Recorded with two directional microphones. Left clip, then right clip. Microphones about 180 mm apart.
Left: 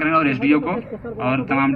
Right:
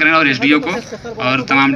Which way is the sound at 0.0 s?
30° left (ahead or behind).